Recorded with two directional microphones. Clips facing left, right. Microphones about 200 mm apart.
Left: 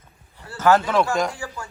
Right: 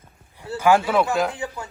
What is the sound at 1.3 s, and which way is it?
Speech, 20° right (ahead or behind).